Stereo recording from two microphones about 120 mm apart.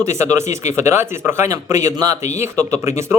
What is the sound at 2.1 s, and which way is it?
Speech, 75° left (ahead or behind).